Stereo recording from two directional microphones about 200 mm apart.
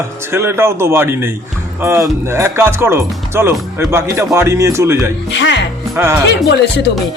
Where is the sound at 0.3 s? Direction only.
15° right (ahead or behind).